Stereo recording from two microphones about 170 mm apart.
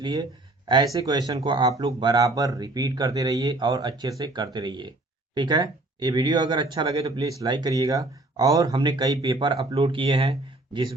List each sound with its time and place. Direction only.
0.0 s speech: 25° right (ahead or behind)